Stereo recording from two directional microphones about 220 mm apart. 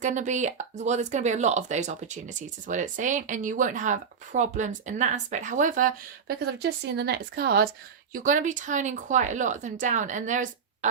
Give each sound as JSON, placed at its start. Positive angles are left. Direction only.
{"t": 0.0, "sound": "speech", "side_deg": -35}
{"t": 8.1, "sound": "speech", "side_deg": -35}